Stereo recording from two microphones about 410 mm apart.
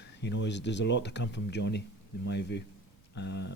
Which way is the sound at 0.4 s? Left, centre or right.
Left.